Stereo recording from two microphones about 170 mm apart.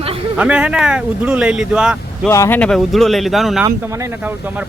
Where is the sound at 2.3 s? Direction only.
20° left (ahead or behind).